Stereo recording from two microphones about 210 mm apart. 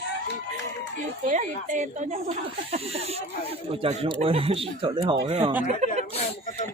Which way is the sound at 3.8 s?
25° right (ahead or behind).